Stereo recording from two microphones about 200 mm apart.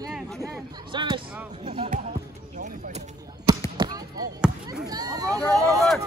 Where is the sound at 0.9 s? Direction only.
25° right (ahead or behind).